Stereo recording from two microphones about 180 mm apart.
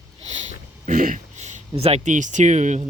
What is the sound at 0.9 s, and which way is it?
Speech, 45° right (ahead or behind).